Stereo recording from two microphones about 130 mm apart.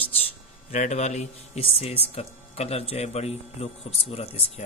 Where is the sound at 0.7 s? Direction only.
65° left (ahead or behind).